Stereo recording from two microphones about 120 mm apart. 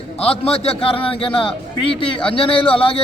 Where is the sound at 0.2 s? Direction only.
55° left (ahead or behind).